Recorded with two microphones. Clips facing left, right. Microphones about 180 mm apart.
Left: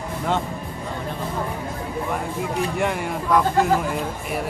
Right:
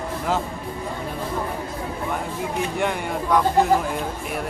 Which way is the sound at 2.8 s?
Centre (ahead or behind).